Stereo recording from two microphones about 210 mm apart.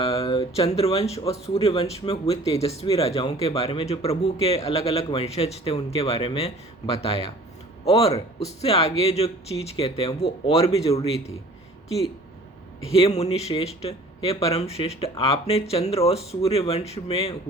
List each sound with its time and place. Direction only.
0.0 s speech: 25° left (ahead or behind)
12.9 s speech: 30° left (ahead or behind)